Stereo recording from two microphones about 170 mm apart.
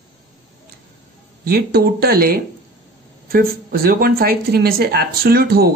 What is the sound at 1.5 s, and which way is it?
Speech, 65° right (ahead or behind).